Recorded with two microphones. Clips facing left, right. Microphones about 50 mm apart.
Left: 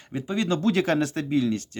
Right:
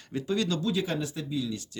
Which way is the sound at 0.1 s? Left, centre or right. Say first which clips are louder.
Left 3 dB; left.